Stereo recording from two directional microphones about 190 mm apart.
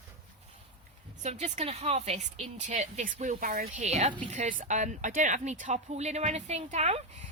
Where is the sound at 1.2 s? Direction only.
35° right (ahead or behind).